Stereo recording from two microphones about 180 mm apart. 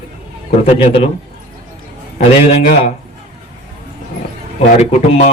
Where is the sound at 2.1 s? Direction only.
40° left (ahead or behind).